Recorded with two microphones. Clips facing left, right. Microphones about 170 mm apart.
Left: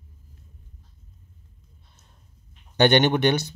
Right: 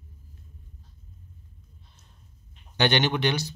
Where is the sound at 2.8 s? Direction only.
50° left (ahead or behind).